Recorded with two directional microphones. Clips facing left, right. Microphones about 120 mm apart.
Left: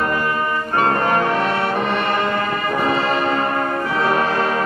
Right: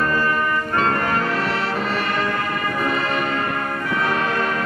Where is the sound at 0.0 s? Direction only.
15° left (ahead or behind); by 4.6 s 35° left (ahead or behind).